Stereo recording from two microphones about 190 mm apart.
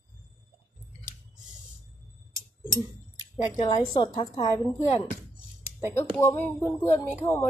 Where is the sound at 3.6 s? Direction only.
25° left (ahead or behind).